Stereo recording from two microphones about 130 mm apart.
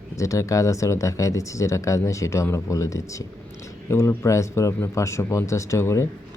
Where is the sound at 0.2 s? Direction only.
25° left (ahead or behind).